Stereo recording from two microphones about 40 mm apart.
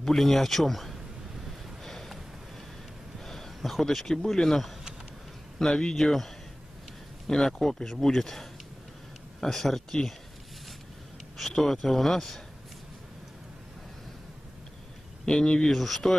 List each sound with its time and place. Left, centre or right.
0.0 s speech: centre
1.9 s a sound: centre
3.3 s a sound: centre
4.1 s speech: centre
5.6 s speech: centre
11.3 s speech: centre
15.2 s speech: left
15.7 s speech: centre